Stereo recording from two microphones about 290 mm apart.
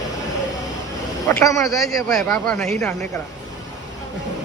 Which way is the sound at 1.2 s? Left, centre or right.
Centre.